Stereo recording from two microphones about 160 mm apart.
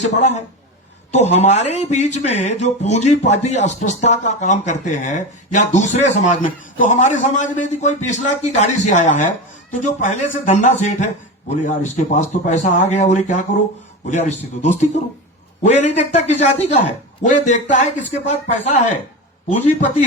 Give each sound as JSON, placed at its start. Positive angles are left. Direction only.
{"t": 0.2, "sound": "speech", "side_deg": 45}